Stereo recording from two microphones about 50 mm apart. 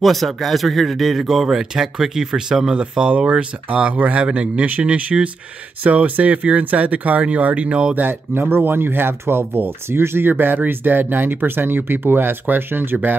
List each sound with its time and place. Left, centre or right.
0.0 s speech: centre; by 7.9 s right
7.9 s speech: right